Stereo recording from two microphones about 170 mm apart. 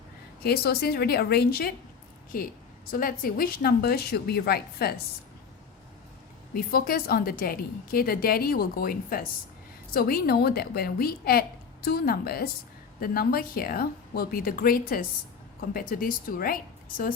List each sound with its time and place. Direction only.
0.4 s a woman's voice: 65° left (ahead or behind)
6.5 s a woman's voice: 60° left (ahead or behind)